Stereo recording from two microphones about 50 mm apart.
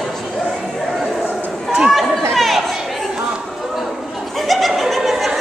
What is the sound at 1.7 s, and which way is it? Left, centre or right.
Chatter, centre.